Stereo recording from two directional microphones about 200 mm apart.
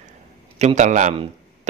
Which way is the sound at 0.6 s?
35° right (ahead or behind).